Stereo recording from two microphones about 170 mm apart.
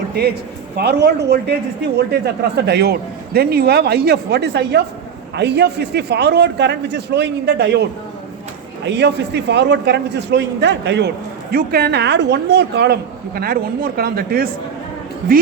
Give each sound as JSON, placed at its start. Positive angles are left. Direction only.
{"t": 0.1, "sound": "a woman's voice", "side_deg": -70}
{"t": 2.6, "sound": "a woman's voice", "side_deg": -75}
{"t": 8.9, "sound": "a man's voice", "side_deg": -85}
{"t": 11.5, "sound": "a woman's voice", "side_deg": -70}